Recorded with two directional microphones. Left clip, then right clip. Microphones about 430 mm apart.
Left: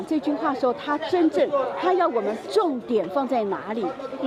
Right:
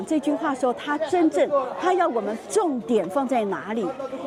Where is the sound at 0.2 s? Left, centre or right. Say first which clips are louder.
Left 2 dB; centre.